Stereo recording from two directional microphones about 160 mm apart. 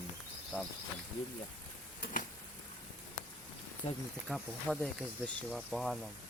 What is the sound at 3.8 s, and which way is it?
Speech, 45° left (ahead or behind).